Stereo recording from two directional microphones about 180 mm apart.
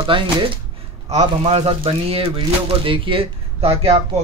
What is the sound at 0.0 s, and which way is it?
A man's voice, 30° right (ahead or behind).